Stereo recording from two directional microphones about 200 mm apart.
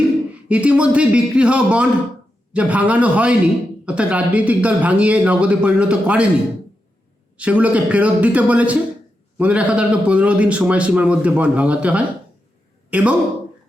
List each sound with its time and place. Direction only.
0.4 s a man's voice: 5° right (ahead or behind)
7.3 s a man's voice: 5° right (ahead or behind)